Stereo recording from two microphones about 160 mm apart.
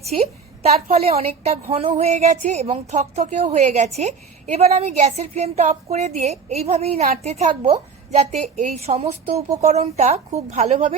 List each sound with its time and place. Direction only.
0.1 s a woman's voice: 40° right (ahead or behind)